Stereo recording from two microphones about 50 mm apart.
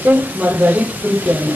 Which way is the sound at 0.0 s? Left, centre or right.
Right.